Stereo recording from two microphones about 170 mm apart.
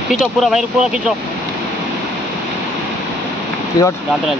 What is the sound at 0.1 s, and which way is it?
Speech, centre (ahead or behind).